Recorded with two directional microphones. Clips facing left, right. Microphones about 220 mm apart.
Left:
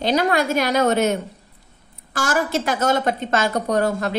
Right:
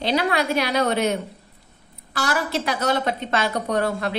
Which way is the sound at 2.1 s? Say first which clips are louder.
Left 3 dB; 45° left (ahead or behind).